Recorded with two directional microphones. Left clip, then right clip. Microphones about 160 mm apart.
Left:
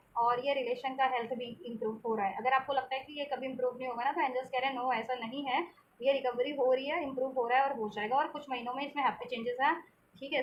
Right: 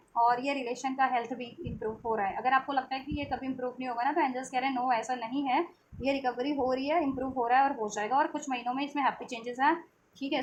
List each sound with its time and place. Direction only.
0.1 s a woman's voice: 50° right (ahead or behind)